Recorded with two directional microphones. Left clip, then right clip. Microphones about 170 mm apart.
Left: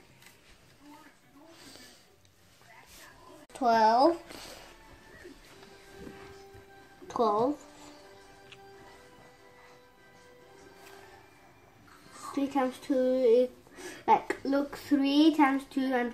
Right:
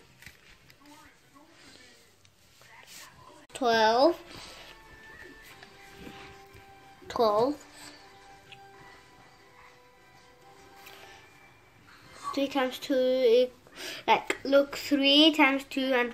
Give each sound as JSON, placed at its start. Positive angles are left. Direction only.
{"t": 3.5, "sound": "speech", "side_deg": 0}
{"t": 4.3, "sound": "music", "side_deg": 15}
{"t": 7.1, "sound": "speech", "side_deg": -5}
{"t": 12.4, "sound": "speech", "side_deg": 0}